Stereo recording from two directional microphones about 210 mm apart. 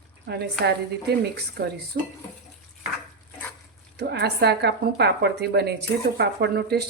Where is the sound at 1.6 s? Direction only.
50° right (ahead or behind).